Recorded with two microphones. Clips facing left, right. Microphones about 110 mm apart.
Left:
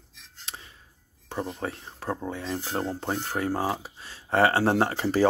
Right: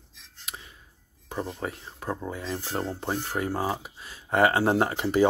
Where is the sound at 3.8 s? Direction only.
30° left (ahead or behind).